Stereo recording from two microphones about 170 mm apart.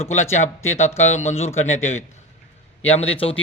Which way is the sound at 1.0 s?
40° left (ahead or behind).